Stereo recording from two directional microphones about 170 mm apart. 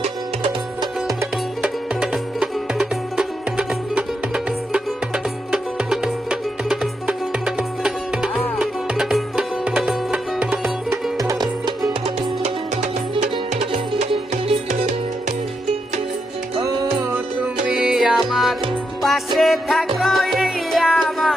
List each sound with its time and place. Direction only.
0.0 s music: 30° right (ahead or behind)
1.6 s music: 5° right (ahead or behind)
11.2 s music: 20° right (ahead or behind)
12.0 s music: 40° right (ahead or behind)
16.6 s music: 20° right (ahead or behind)
17.7 s music: 5° right (ahead or behind)